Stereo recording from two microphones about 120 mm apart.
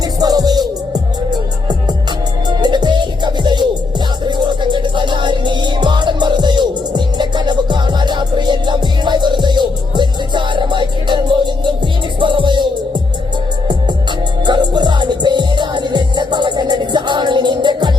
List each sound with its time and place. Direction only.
0.2 s music: 30° right (ahead or behind)
2.5 s music: 40° right (ahead or behind)
14.4 s music: 40° right (ahead or behind)